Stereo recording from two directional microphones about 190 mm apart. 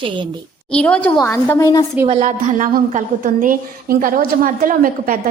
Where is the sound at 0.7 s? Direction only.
5° left (ahead or behind).